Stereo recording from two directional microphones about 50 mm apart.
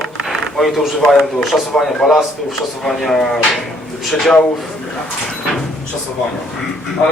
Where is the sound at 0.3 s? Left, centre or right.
Centre.